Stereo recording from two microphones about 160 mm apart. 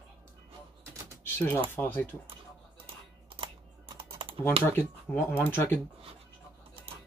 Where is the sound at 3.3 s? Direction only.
35° right (ahead or behind).